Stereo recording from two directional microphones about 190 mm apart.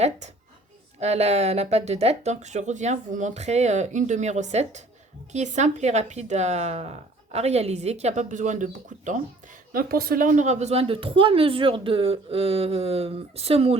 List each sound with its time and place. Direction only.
0.9 s a woman's voice: 35° right (ahead or behind)